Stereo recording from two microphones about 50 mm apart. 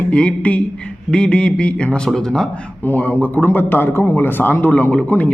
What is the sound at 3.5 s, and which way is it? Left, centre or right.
A man's voice, left.